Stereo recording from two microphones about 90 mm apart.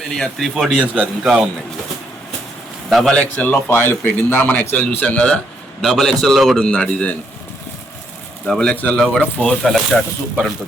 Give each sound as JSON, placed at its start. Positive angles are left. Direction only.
{"t": 0.1, "sound": "a man's voice", "side_deg": 5}
{"t": 2.9, "sound": "a man's voice", "side_deg": 10}
{"t": 5.8, "sound": "speech", "side_deg": 0}
{"t": 8.4, "sound": "a man's voice", "side_deg": 10}